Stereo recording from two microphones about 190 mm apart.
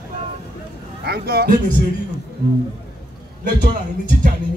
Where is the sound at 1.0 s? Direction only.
55° right (ahead or behind).